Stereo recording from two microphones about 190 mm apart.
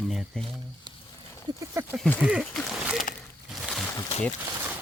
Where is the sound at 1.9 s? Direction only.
5° left (ahead or behind).